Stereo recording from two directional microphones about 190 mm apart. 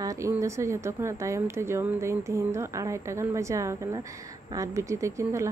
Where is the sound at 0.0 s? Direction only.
15° right (ahead or behind).